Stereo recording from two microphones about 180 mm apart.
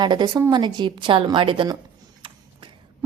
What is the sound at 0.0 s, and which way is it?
A woman's voice, 25° right (ahead or behind).